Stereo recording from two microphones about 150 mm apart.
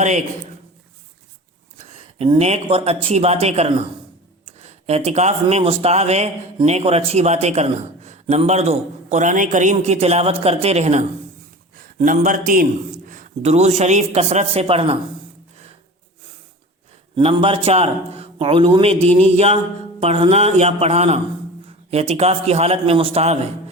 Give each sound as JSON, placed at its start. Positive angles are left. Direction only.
{"t": 0.0, "sound": "speech", "side_deg": -55}
{"t": 1.8, "sound": "a man's voice", "side_deg": -40}
{"t": 17.2, "sound": "a man's voice", "side_deg": -35}